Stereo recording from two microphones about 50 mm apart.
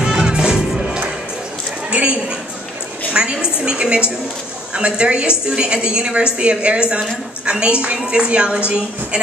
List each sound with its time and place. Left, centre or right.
0.0 s music: centre
1.9 s a sound: right
4.7 s a woman's voice: centre